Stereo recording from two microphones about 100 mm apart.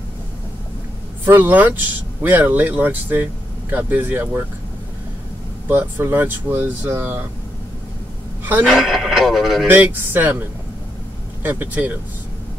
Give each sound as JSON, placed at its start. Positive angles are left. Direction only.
{"t": 1.2, "sound": "speech", "side_deg": -20}
{"t": 5.7, "sound": "speech", "side_deg": -20}
{"t": 8.6, "sound": "speech", "side_deg": -5}
{"t": 9.7, "sound": "speech", "side_deg": -20}
{"t": 11.4, "sound": "speech", "side_deg": -20}